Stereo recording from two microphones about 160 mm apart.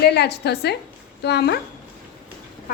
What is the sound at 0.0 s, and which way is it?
A woman's voice, 90° left.